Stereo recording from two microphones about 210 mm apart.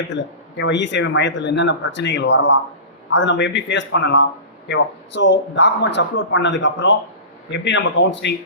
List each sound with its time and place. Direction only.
0.1 s speech: 60° left (ahead or behind)